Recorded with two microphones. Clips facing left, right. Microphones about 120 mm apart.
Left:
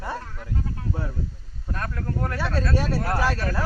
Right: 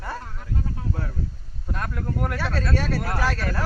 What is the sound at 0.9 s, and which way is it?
Speech, 10° left (ahead or behind).